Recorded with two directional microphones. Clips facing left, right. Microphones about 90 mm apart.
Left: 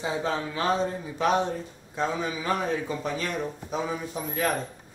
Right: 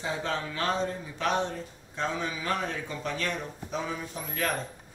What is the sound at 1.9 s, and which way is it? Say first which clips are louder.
A man's voice: left 3 dB; 10° left (ahead or behind).